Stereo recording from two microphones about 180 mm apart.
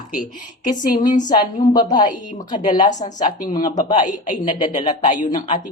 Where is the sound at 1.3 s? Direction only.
20° left (ahead or behind).